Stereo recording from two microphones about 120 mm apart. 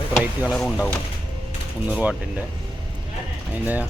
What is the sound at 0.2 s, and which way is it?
Speech, 5° right (ahead or behind).